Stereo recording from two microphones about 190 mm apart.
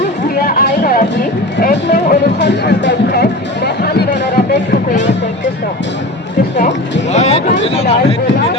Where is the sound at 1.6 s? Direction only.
50° left (ahead or behind); by 5.1 s 70° left (ahead or behind).